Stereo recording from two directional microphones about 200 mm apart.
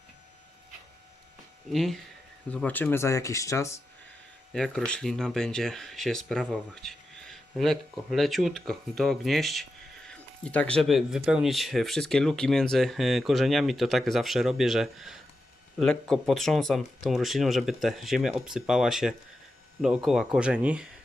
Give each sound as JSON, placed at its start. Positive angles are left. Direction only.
{"t": 1.7, "sound": "speech", "side_deg": 0}
{"t": 4.5, "sound": "speech", "side_deg": 5}